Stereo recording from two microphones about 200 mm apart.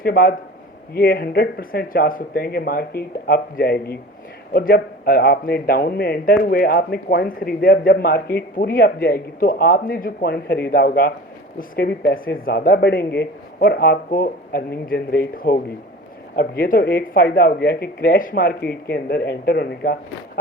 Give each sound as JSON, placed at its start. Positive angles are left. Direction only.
{"t": 0.0, "sound": "a man's voice", "side_deg": 45}